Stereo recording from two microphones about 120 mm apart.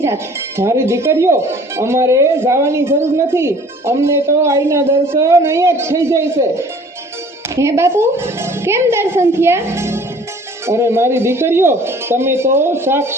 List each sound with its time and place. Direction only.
0.0 s speech: 20° right (ahead or behind)